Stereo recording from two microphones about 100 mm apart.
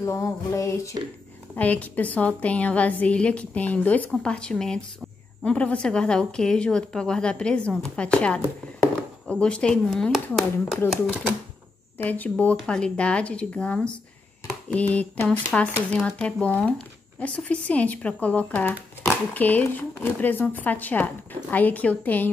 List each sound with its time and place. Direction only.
0.0 s music: 30° left (ahead or behind)
1.5 s speech: 15° left (ahead or behind)
12.0 s speech: 15° left (ahead or behind)